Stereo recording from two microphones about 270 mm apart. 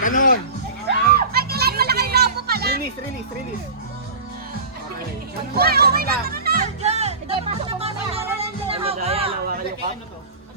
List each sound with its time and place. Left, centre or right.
0.0 s music: left
0.9 s children playing: right
5.5 s music: right